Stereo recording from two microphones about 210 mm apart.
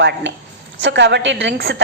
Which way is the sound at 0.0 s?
60° right (ahead or behind).